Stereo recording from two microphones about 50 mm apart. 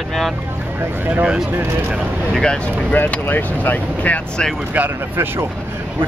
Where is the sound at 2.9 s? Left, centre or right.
Left.